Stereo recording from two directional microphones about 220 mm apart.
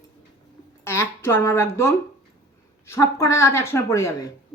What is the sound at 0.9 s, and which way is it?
A woman's voice, 10° left (ahead or behind).